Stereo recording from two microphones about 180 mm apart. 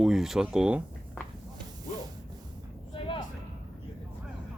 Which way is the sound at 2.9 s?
25° left (ahead or behind).